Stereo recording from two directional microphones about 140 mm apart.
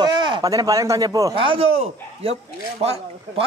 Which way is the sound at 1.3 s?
40° right (ahead or behind).